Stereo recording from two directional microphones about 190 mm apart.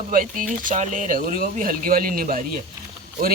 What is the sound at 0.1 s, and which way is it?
Speech, 45° right (ahead or behind).